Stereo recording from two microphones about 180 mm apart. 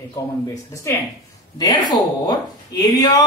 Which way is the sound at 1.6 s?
20° left (ahead or behind).